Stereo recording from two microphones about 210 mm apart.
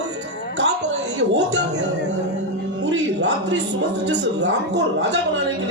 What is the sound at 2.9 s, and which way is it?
A man's voice, 55° right (ahead or behind).